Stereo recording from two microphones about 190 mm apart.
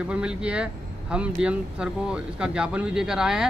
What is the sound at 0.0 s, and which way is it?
Speech, 5° right (ahead or behind).